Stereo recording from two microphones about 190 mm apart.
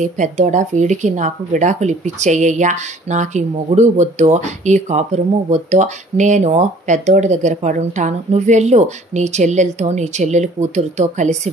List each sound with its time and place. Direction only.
0.0 s speech: 40° right (ahead or behind)